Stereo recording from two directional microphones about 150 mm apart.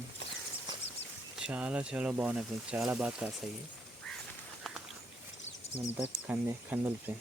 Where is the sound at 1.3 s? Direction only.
5° right (ahead or behind).